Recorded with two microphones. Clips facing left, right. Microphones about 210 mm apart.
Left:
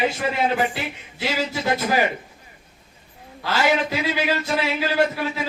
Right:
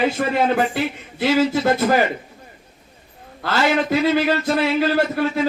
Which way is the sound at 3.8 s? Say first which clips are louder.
Right 6 dB; 50° right (ahead or behind).